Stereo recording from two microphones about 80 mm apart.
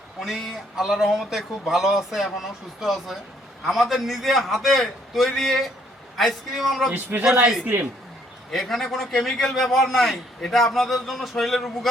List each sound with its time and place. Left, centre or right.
0.2 s a man's voice: centre
7.1 s speech: right
7.4 s a man's voice: centre
8.4 s a man's voice: centre